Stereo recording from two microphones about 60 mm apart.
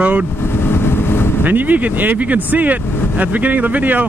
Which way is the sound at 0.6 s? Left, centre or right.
Left.